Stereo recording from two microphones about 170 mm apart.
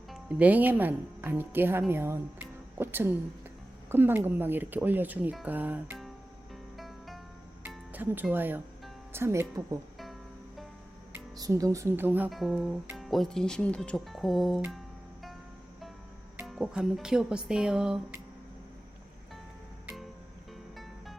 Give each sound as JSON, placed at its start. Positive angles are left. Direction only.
{"t": 0.1, "sound": "speech", "side_deg": -5}
{"t": 6.7, "sound": "music", "side_deg": 0}
{"t": 7.9, "sound": "speech", "side_deg": -10}
{"t": 11.1, "sound": "speech", "side_deg": -20}
{"t": 12.3, "sound": "speech", "side_deg": 0}
{"t": 16.5, "sound": "speech", "side_deg": -5}